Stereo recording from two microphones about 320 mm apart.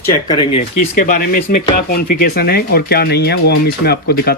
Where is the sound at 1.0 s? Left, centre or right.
Left.